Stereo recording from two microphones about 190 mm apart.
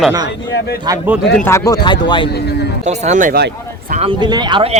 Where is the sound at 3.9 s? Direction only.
30° right (ahead or behind).